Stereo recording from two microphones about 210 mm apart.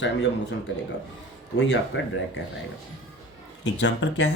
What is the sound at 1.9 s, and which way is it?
Speech, 60° left (ahead or behind).